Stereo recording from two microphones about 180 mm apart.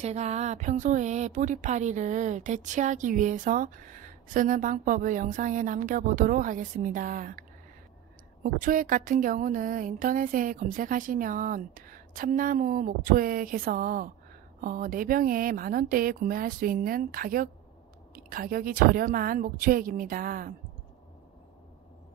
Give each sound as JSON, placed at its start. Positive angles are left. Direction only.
{"t": 0.0, "sound": "speech", "side_deg": -35}
{"t": 8.5, "sound": "speech", "side_deg": -50}